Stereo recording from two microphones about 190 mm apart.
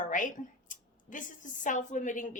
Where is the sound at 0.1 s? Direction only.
45° left (ahead or behind).